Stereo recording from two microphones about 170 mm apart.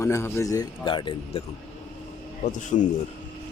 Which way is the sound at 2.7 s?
40° left (ahead or behind).